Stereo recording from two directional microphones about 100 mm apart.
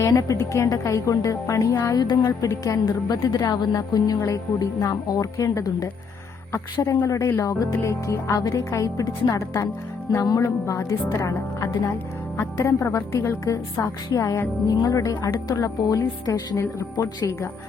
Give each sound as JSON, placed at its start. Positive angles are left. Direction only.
{"t": 0.0, "sound": "speech", "side_deg": 35}
{"t": 7.0, "sound": "a woman's voice", "side_deg": 30}